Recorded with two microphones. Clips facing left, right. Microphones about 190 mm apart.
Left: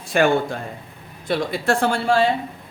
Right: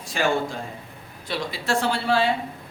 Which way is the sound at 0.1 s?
60° left (ahead or behind).